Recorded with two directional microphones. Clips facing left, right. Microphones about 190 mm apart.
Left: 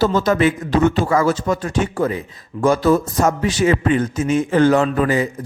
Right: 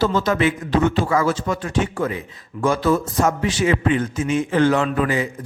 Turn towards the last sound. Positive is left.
turn(degrees=40)  # may be behind; listen again after turning